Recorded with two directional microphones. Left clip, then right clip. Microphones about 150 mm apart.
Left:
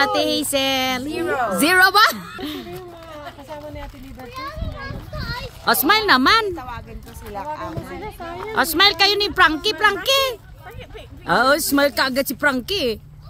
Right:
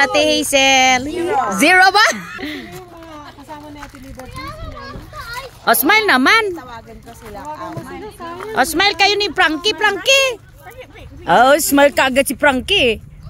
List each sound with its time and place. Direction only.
0.0 s speech: 20° right (ahead or behind)
1.0 s speech: 25° left (ahead or behind)
1.6 s a woman's voice: 20° right (ahead or behind)
5.7 s a woman's voice: 25° right (ahead or behind)
8.0 s speech: centre (ahead or behind)
8.5 s speech: 20° right (ahead or behind)